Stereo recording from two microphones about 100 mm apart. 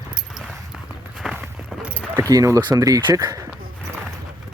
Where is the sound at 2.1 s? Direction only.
35° right (ahead or behind).